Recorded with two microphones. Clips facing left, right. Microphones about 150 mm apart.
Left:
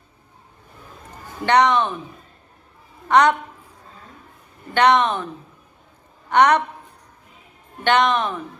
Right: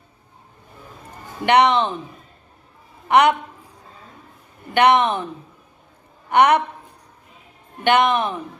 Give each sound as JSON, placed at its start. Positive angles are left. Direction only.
{"t": 1.5, "sound": "speech", "side_deg": -15}
{"t": 3.1, "sound": "speech", "side_deg": -10}
{"t": 4.7, "sound": "speech", "side_deg": -15}
{"t": 6.3, "sound": "speech", "side_deg": -10}
{"t": 7.9, "sound": "speech", "side_deg": -15}